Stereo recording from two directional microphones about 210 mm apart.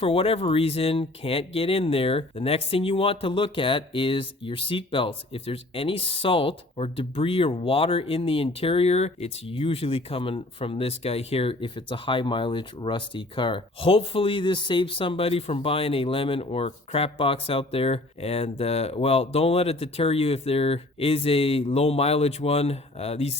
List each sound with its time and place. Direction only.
0.0 s speech: 25° left (ahead or behind)